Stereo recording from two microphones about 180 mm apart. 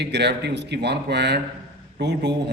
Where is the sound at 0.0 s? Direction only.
70° right (ahead or behind).